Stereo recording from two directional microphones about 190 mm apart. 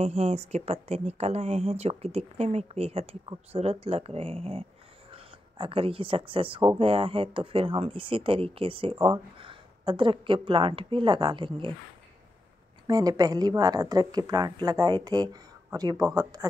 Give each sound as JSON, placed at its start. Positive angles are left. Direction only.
{"t": 0.0, "sound": "speech", "side_deg": -35}
{"t": 12.8, "sound": "speech", "side_deg": -20}